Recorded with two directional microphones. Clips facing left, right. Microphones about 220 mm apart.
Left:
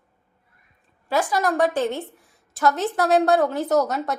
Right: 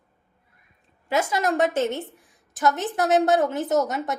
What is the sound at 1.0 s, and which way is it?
A woman's voice, 20° right (ahead or behind).